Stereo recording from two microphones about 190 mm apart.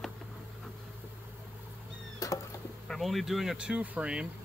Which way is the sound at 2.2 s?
20° left (ahead or behind).